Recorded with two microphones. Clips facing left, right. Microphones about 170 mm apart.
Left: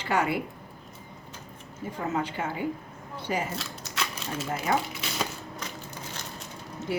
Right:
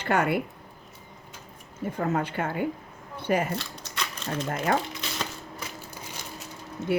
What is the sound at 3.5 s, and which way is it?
Crumpling, centre (ahead or behind).